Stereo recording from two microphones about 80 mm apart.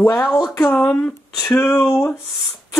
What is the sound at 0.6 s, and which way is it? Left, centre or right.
Speech, centre.